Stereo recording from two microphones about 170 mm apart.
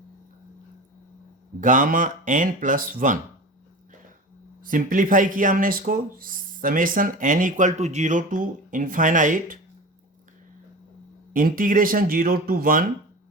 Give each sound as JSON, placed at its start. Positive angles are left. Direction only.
{"t": 1.6, "sound": "speech", "side_deg": -50}
{"t": 4.6, "sound": "speech", "side_deg": -55}
{"t": 11.3, "sound": "speech", "side_deg": -55}